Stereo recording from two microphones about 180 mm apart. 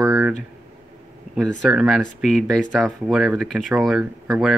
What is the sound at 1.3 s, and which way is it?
Speech, centre (ahead or behind).